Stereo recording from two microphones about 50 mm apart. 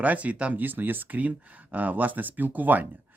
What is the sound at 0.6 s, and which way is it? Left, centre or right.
Speech, right.